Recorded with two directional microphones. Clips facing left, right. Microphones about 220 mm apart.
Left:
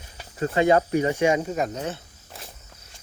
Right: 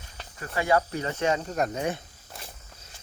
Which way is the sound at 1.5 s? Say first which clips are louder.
Left 1 dB; centre (ahead or behind).